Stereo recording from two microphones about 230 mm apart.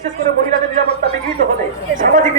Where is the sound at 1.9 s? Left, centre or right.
Right.